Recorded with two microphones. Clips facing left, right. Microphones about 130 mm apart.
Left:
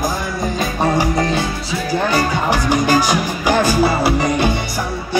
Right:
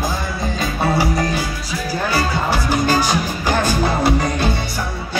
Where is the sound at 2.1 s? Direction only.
15° left (ahead or behind).